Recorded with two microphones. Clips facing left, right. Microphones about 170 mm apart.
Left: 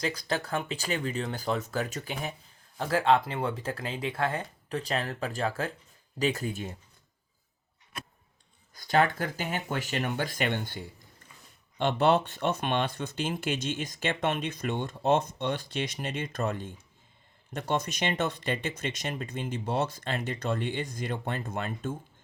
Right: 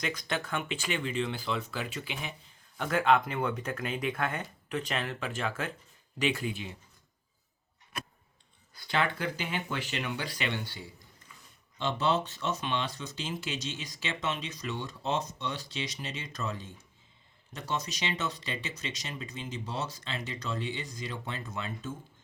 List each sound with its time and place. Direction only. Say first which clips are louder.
0.0 s speech: left 3 dB; 35° left (ahead or behind)
2.7 s speech: left 2 dB; 30° left (ahead or behind)
8.7 s speech: left 6 dB; 45° left (ahead or behind)